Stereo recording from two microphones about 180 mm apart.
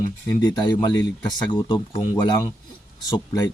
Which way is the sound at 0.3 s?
25° left (ahead or behind).